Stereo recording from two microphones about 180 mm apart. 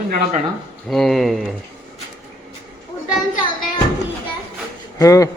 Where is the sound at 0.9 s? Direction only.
Centre (ahead or behind).